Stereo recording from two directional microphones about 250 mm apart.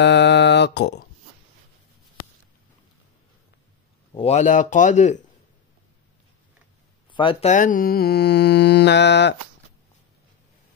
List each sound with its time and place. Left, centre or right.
0.0 s a sound: left
4.1 s speech: left
7.2 s mantra: left